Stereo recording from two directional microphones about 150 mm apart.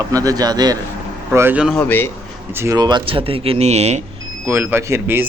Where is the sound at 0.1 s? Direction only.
25° right (ahead or behind).